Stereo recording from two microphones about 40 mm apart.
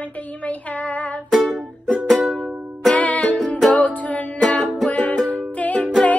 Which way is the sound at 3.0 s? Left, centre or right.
Left.